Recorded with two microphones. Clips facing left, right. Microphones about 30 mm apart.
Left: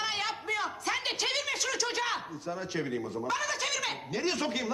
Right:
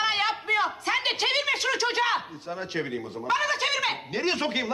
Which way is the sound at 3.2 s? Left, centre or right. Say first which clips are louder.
Right 8 dB; right.